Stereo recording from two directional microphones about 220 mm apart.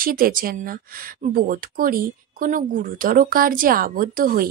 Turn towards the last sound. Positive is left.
turn(degrees=-40)  # may be behind; listen again after turning